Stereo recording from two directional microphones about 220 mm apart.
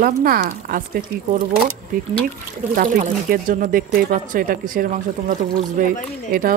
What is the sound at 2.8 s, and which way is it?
A woman's voice, 35° right (ahead or behind).